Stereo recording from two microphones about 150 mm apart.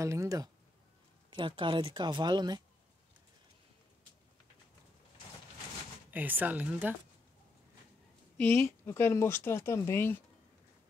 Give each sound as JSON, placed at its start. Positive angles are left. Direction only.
{"t": 0.0, "sound": "speech", "side_deg": -20}
{"t": 1.3, "sound": "speech", "side_deg": -35}
{"t": 6.0, "sound": "speech", "side_deg": -10}
{"t": 8.4, "sound": "speech", "side_deg": 15}